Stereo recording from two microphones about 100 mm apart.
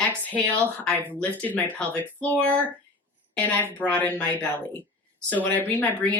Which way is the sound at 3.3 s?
15° left (ahead or behind).